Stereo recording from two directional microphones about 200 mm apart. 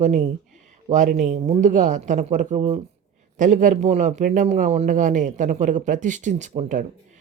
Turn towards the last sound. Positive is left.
turn(degrees=-40)  # may be behind; listen again after turning